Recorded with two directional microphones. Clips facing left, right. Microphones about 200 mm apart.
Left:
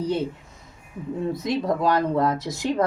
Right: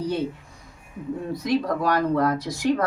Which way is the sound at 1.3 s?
25° left (ahead or behind).